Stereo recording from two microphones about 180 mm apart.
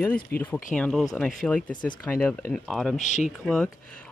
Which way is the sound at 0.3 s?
60° left (ahead or behind).